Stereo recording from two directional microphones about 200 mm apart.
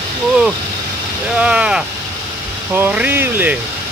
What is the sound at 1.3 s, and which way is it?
Speech, 5° right (ahead or behind).